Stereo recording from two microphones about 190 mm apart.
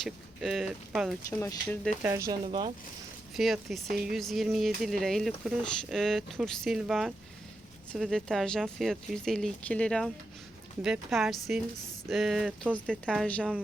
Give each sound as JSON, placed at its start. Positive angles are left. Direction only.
{"t": 0.0, "sound": "speech", "side_deg": 0}
{"t": 1.3, "sound": "speech", "side_deg": 10}
{"t": 2.0, "sound": "speech", "side_deg": -10}
{"t": 2.4, "sound": "speech", "side_deg": -25}
{"t": 3.3, "sound": "speech", "side_deg": 0}
{"t": 13.1, "sound": "speech", "side_deg": 5}